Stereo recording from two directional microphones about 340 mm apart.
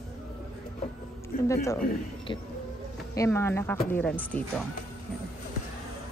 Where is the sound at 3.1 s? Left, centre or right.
Centre.